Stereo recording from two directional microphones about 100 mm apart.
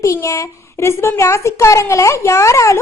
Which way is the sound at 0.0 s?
30° left (ahead or behind).